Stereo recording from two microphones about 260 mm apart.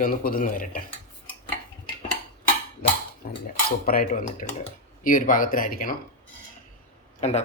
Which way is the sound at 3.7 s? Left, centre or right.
Left.